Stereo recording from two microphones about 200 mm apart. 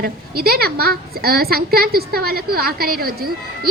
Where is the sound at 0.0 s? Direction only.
50° right (ahead or behind).